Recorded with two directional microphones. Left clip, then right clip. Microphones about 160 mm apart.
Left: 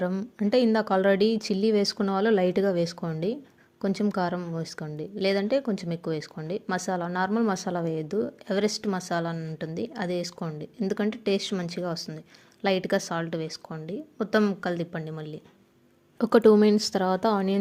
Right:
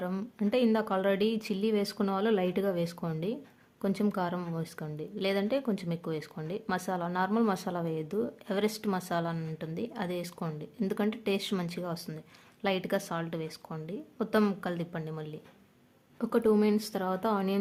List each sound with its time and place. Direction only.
0.5 s a woman's voice: 25° left (ahead or behind)
16.1 s speech: 40° left (ahead or behind)